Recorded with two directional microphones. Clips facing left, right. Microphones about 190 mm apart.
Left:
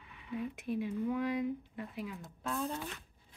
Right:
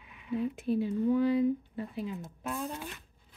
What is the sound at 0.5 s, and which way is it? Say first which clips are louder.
Speech: right 6 dB; 30° right (ahead or behind).